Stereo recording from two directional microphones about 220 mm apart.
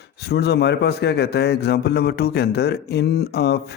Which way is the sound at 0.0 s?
50° left (ahead or behind).